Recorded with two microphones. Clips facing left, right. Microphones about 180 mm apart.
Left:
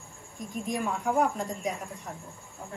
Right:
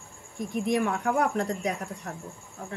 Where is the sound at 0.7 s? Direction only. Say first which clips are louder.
Right 4 dB; 70° right (ahead or behind).